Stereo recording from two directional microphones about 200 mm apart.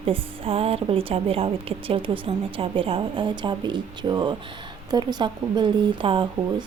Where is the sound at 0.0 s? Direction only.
30° right (ahead or behind).